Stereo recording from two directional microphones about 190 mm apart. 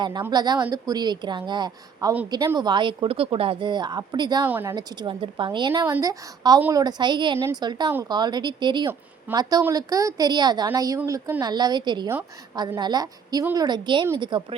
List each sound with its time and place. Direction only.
0.0 s speech: 20° right (ahead or behind)
4.4 s speech: 10° right (ahead or behind)
4.7 s speech: 20° right (ahead or behind)